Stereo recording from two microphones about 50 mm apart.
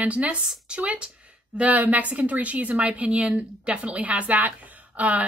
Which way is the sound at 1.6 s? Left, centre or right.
Right.